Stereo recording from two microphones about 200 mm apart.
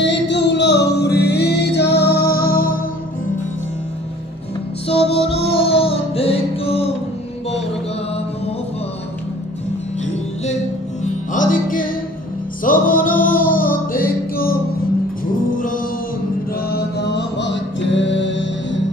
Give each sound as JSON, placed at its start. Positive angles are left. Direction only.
{"t": 0.0, "sound": "music", "side_deg": 60}
{"t": 4.8, "sound": "music", "side_deg": 30}
{"t": 11.3, "sound": "music", "side_deg": 40}
{"t": 16.7, "sound": "music", "side_deg": 55}